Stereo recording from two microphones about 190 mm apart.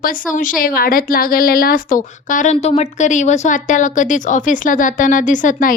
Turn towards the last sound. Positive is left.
turn(degrees=45)  # may be behind; listen again after turning